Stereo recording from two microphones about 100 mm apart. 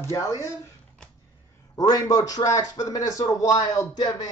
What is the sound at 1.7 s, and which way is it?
A man's voice, 40° left (ahead or behind).